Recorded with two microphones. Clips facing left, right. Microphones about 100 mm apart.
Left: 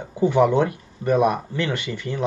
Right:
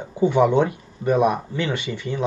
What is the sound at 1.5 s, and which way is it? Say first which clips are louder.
Speech: even; 10° right (ahead or behind).